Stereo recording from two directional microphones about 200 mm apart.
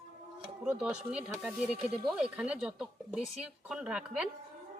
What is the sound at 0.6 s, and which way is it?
Speech, 5° right (ahead or behind).